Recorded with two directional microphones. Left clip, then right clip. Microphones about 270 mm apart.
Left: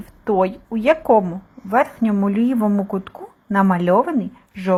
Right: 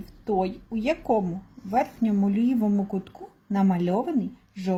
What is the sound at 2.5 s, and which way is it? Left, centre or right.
Speech, left.